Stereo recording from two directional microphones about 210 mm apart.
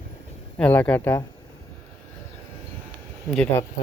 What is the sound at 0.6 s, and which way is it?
Speech, 5° left (ahead or behind).